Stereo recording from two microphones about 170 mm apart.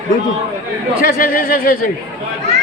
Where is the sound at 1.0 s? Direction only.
55° left (ahead or behind).